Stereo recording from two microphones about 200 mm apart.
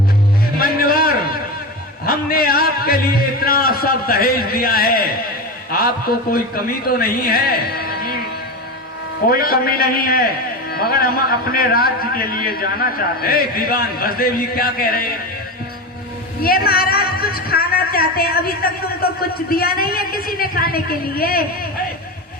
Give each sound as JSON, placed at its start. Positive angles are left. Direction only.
{"t": 0.5, "sound": "a sound", "side_deg": 45}
{"t": 5.7, "sound": "a man's voice", "side_deg": 50}
{"t": 9.3, "sound": "a man's voice", "side_deg": 50}
{"t": 16.4, "sound": "a woman's voice", "side_deg": 50}